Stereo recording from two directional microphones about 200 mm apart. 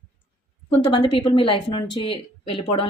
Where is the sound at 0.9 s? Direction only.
25° left (ahead or behind).